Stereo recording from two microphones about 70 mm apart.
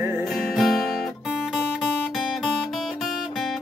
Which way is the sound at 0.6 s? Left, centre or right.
Centre.